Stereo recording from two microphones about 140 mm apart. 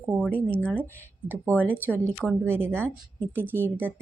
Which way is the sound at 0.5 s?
10° left (ahead or behind).